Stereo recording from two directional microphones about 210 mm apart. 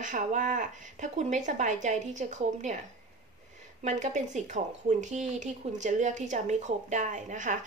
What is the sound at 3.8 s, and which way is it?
A woman's voice, 35° right (ahead or behind).